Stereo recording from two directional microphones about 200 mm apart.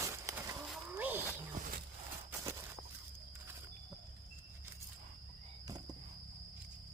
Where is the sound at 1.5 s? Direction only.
40° right (ahead or behind).